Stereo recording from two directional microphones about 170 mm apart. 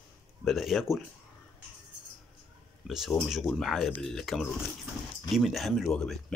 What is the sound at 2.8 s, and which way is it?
Speech, centre (ahead or behind).